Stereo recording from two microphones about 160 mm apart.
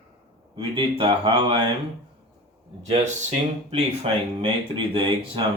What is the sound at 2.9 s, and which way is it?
Speech, 45° right (ahead or behind).